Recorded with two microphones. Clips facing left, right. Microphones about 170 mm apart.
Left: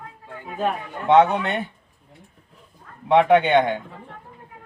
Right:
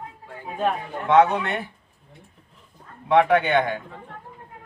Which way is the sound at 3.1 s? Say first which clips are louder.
Left 2 dB; 20° left (ahead or behind).